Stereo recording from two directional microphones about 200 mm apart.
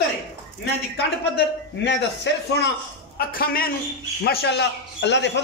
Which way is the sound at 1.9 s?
60° left (ahead or behind).